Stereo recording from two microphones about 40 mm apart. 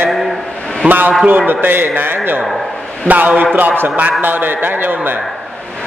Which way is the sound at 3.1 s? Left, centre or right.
Right.